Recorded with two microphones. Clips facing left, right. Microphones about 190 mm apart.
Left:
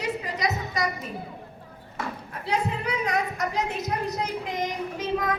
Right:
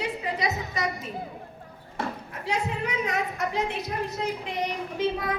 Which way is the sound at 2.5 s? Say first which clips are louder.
Left 2 dB; 35° left (ahead or behind).